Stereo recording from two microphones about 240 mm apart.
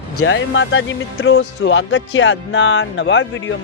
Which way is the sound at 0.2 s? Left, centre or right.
Left.